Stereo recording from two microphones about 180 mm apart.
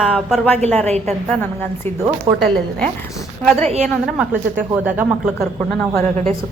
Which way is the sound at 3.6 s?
35° right (ahead or behind).